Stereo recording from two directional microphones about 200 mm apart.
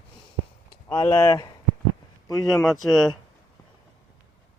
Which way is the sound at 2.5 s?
Centre (ahead or behind).